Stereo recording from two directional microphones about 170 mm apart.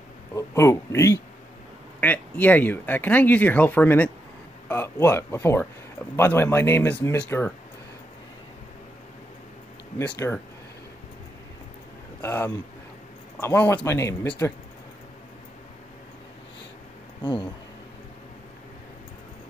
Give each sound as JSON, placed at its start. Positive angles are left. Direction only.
{"t": 0.3, "sound": "speech", "side_deg": 15}
{"t": 10.1, "sound": "speech", "side_deg": 15}
{"t": 12.2, "sound": "speech", "side_deg": 15}
{"t": 17.2, "sound": "speech", "side_deg": 30}